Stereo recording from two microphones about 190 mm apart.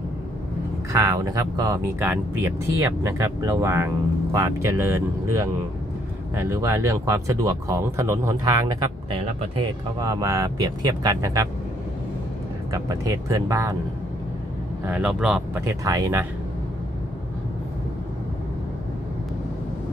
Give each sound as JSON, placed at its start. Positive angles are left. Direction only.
{"t": 0.9, "sound": "speech", "side_deg": -15}
{"t": 12.7, "sound": "speech", "side_deg": -20}
{"t": 14.9, "sound": "speech", "side_deg": -5}
{"t": 15.6, "sound": "speech", "side_deg": -15}